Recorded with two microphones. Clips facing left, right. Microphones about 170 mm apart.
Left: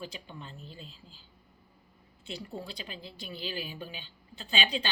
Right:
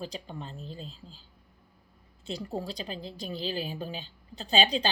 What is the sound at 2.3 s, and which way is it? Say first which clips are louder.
A woman's voice: right 6 dB; 40° right (ahead or behind).